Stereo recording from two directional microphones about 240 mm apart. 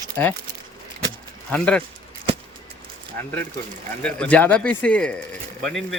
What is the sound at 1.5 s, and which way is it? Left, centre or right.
Speech, centre.